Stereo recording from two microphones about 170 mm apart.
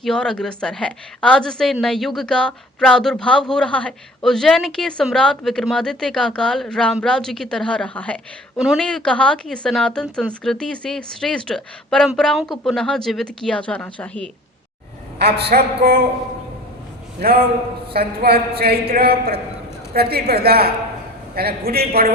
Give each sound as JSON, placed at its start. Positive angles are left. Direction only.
{"t": 0.0, "sound": "a woman's voice", "side_deg": 5}
{"t": 15.2, "sound": "a man's voice", "side_deg": -70}
{"t": 17.2, "sound": "a man's voice", "side_deg": -60}